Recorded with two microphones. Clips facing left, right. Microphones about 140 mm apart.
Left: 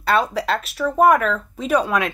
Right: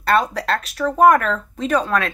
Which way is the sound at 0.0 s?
5° left (ahead or behind).